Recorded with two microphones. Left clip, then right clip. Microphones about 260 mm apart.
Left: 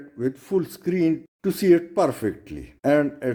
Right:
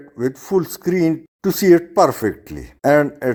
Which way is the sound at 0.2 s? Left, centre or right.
Centre.